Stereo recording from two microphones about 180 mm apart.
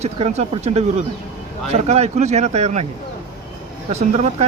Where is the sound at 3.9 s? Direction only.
40° right (ahead or behind).